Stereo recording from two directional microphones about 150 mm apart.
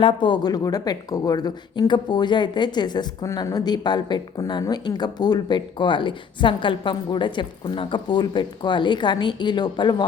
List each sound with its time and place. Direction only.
0.0 s speech: 30° left (ahead or behind)